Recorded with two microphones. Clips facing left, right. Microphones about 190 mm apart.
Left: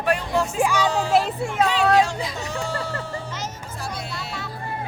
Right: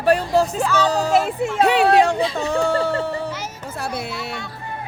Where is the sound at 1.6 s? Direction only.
60° right (ahead or behind).